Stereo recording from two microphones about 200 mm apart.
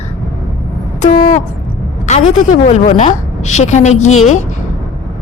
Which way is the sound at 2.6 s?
40° left (ahead or behind).